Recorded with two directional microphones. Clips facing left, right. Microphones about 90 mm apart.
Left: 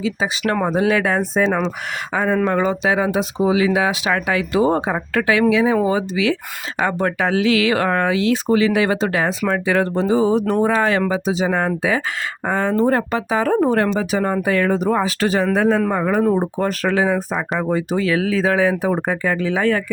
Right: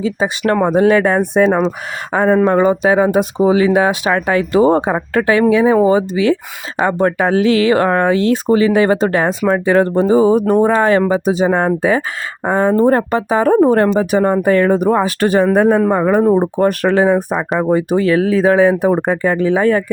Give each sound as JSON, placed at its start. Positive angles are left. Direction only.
{"t": 0.0, "sound": "speech", "side_deg": -40}
{"t": 2.4, "sound": "speech", "side_deg": -30}
{"t": 2.6, "sound": "speech", "side_deg": -45}
{"t": 6.7, "sound": "speech", "side_deg": -30}
{"t": 16.4, "sound": "speech", "side_deg": -50}